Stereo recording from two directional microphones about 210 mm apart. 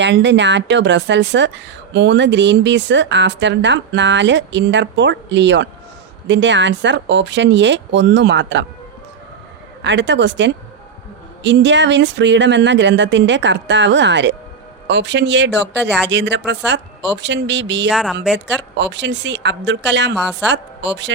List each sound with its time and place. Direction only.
0.0 s a woman's voice: 55° right (ahead or behind)
9.8 s a woman's voice: 55° right (ahead or behind)
17.9 s speech: centre (ahead or behind)
18.4 s a woman's voice: 55° right (ahead or behind)
20.1 s speech: 5° right (ahead or behind)
20.5 s a woman's voice: 55° right (ahead or behind)